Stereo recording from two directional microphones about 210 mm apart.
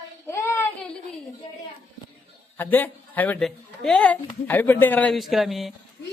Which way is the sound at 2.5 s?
10° left (ahead or behind).